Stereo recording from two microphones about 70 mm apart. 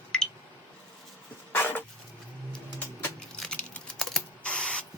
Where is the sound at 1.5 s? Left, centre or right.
Left.